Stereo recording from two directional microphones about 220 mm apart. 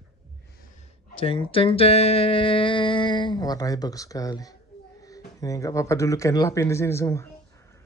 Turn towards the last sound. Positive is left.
turn(degrees=10)  # may be behind; listen again after turning